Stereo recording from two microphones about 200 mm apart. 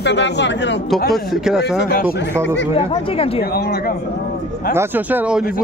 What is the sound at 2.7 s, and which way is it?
Speech, 30° left (ahead or behind).